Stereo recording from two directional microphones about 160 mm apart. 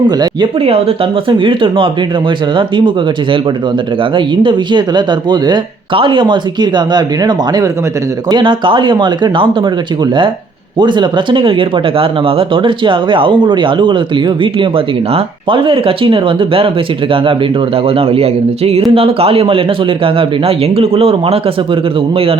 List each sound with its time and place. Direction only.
0.6 s speech: 35° right (ahead or behind)
4.1 s speech: 30° right (ahead or behind)
10.8 s speech: 30° right (ahead or behind)
17.8 s speech: 35° right (ahead or behind)